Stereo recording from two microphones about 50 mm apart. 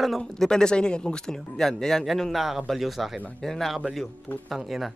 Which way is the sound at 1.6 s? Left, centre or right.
Centre.